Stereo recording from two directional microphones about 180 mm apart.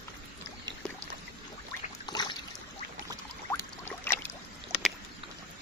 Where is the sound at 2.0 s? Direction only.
25° left (ahead or behind).